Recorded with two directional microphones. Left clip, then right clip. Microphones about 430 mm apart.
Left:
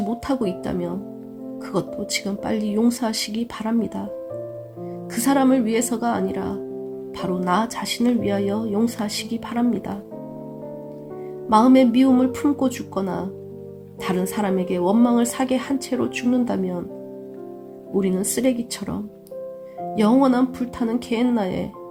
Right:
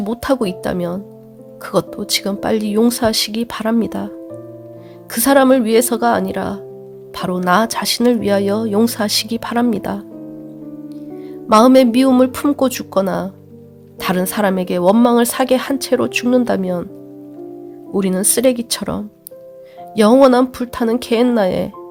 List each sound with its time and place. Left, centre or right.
0.1 s a woman's voice: centre
5.1 s a woman's voice: centre
11.4 s a woman's voice: centre
17.9 s a woman's voice: centre
20.0 s a woman's voice: right